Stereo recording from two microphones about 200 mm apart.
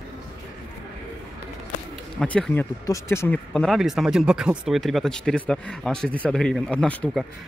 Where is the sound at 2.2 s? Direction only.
5° left (ahead or behind).